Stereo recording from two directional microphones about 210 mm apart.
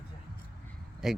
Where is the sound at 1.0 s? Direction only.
Centre (ahead or behind).